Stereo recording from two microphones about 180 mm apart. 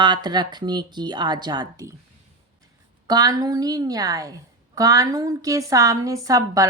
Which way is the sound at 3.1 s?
20° right (ahead or behind).